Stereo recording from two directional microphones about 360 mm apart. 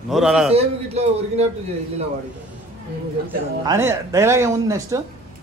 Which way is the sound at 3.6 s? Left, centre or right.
Centre.